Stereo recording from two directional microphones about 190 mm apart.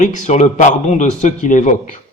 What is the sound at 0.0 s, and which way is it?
Speech, 40° left (ahead or behind).